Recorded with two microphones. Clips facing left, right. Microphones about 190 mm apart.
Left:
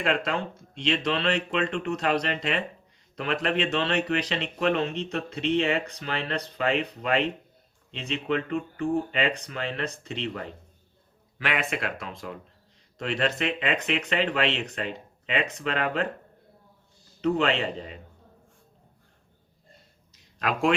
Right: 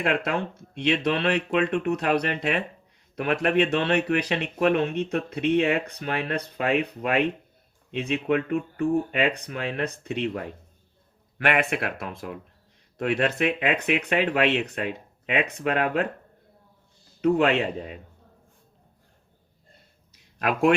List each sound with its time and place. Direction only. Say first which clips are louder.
0.3 s speech: right 2 dB; 60° right (ahead or behind)
17.2 s speech: right 4 dB; 55° right (ahead or behind)
20.4 s speech: right 4 dB; 55° right (ahead or behind)